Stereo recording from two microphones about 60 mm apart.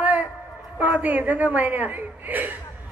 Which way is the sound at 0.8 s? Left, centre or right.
Right.